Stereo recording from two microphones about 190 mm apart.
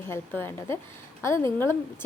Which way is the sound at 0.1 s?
10° left (ahead or behind).